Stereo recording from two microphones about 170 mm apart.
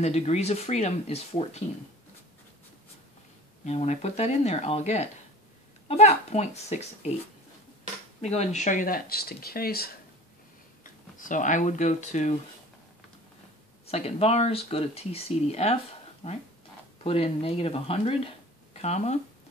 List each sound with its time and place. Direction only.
0.0 s speech: 40° left (ahead or behind)
3.6 s speech: 40° left (ahead or behind)
8.2 s speech: 40° left (ahead or behind); by 9.9 s 65° left (ahead or behind)
10.8 s speech: 50° left (ahead or behind)
13.8 s speech: 35° left (ahead or behind)